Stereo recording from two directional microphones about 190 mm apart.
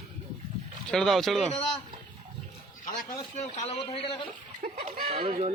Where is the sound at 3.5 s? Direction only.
30° left (ahead or behind).